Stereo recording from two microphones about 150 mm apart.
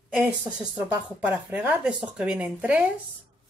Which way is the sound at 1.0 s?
10° right (ahead or behind).